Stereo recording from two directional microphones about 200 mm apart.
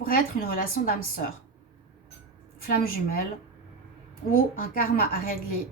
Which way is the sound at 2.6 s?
45° left (ahead or behind).